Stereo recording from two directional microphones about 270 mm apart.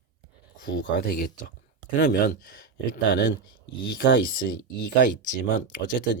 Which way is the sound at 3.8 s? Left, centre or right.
Left.